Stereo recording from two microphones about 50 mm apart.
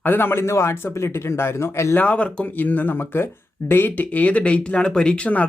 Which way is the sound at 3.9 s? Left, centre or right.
Left.